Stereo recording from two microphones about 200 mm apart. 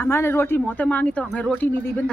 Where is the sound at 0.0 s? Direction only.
10° left (ahead or behind).